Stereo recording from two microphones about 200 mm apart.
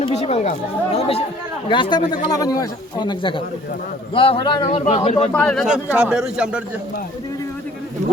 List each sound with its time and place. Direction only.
0.0 s a man's voice: 30° left (ahead or behind)
5.3 s a man's voice: 5° left (ahead or behind)